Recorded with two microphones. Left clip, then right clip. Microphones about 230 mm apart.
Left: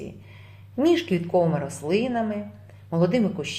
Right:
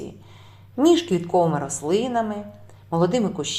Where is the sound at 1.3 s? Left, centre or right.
Centre.